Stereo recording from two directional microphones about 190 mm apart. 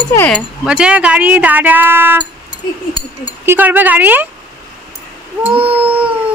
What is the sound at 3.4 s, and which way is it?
Speech, 10° right (ahead or behind).